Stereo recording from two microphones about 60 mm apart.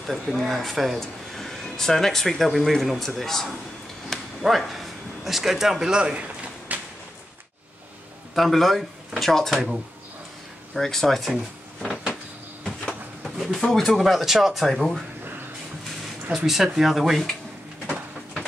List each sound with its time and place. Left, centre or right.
0.0 s speech: centre
4.1 s a sound: centre; by 6.8 s right
8.4 s speech: centre
9.5 s speech: centre
10.7 s speech: centre
13.2 s speech: centre
16.3 s speech: centre